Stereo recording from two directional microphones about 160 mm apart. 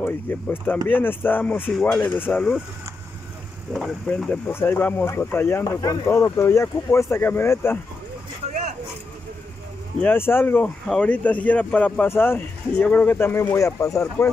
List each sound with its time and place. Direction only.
0.0 s speech: 10° left (ahead or behind)
3.7 s speech: 5° left (ahead or behind)
8.5 s vehicle: 45° right (ahead or behind)
10.0 s speech: 15° left (ahead or behind)